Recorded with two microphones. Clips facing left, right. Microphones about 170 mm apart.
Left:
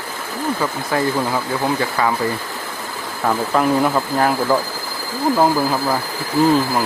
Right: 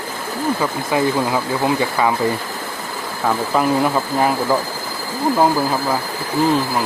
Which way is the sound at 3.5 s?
5° right (ahead or behind).